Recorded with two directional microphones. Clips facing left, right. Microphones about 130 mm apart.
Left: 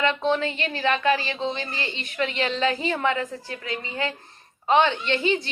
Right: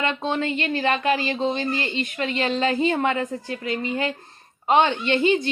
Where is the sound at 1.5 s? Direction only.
50° right (ahead or behind).